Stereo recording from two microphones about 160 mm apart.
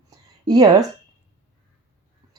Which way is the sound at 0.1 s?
25° right (ahead or behind).